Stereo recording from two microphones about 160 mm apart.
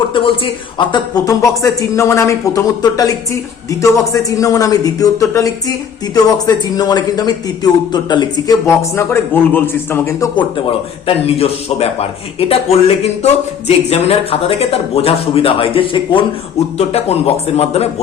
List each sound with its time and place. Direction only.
0.8 s speech: 30° left (ahead or behind)
11.0 s a man's voice: 40° left (ahead or behind)